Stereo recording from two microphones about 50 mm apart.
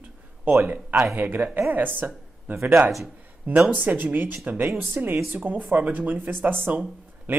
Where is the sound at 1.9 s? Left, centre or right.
Right.